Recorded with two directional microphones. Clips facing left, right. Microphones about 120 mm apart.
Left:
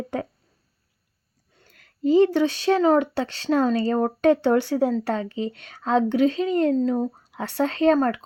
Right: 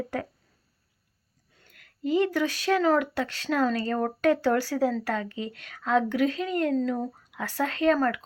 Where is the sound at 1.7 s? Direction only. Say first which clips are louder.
Left 7 dB; 30° left (ahead or behind).